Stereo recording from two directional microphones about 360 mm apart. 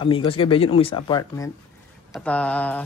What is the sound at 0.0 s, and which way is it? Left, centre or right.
Speech, centre.